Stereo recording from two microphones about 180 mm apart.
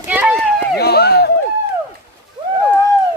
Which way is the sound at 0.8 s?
60° left (ahead or behind).